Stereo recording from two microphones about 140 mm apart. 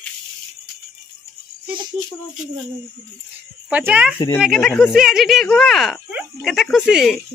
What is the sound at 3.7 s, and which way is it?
Speech, 10° right (ahead or behind).